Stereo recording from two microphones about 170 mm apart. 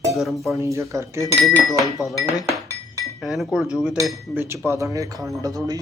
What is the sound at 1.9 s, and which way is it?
Speech, 20° left (ahead or behind).